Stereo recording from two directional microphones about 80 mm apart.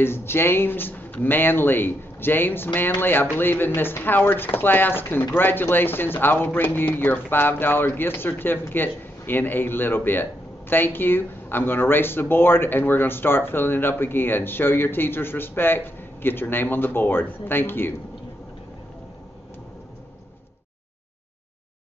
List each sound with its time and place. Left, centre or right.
0.0 s speech: left